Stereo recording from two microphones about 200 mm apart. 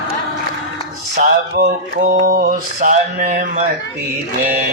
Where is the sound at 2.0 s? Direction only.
50° right (ahead or behind).